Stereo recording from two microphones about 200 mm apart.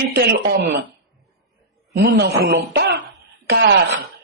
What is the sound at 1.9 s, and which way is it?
Speech, 50° right (ahead or behind).